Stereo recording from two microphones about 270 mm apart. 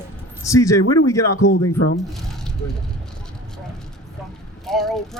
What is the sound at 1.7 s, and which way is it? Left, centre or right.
Speech, left.